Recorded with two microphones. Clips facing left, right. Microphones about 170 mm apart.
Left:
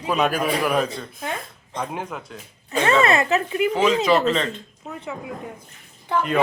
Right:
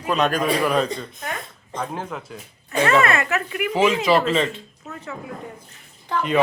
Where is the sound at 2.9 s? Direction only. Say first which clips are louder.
Left 2 dB; 25° left (ahead or behind).